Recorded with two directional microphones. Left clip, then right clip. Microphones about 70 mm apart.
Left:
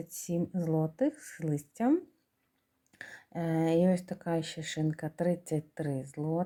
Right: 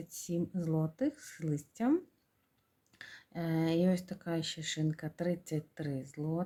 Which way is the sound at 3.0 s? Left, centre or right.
Left.